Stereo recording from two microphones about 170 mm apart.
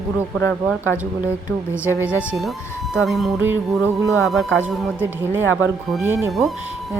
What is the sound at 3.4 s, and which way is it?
Speech, 10° right (ahead or behind).